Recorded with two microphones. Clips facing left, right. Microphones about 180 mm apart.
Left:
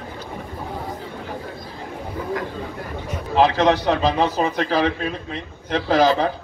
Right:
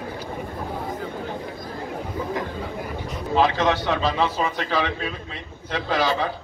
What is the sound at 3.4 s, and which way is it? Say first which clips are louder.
A man's voice: left 4 dB; 40° left (ahead or behind).